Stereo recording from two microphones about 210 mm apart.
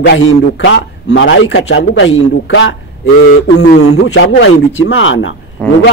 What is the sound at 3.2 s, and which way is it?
Speech, 50° left (ahead or behind).